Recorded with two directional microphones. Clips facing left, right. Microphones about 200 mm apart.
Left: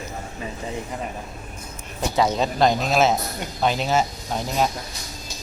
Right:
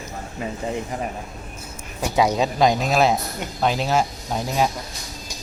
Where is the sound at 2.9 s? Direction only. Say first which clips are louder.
Right 1 dB; centre (ahead or behind).